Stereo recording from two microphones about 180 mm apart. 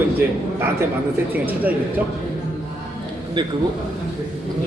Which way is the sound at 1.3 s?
10° right (ahead or behind).